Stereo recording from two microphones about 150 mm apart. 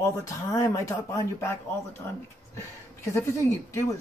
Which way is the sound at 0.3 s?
20° left (ahead or behind).